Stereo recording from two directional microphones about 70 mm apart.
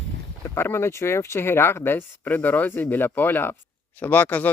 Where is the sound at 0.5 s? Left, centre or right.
Left.